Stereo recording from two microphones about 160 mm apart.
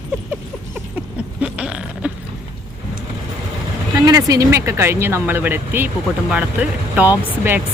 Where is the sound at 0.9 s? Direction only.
5° right (ahead or behind).